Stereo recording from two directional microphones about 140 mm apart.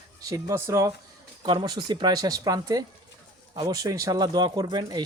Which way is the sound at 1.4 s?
30° right (ahead or behind).